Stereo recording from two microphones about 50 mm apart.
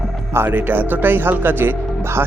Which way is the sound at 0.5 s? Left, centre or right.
Right.